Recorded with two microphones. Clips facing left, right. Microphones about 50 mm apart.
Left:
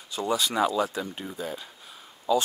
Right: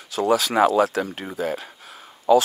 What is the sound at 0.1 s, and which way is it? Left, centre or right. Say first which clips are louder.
Speech: right 7 dB; right.